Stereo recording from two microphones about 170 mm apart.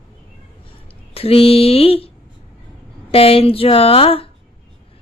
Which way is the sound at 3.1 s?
35° left (ahead or behind).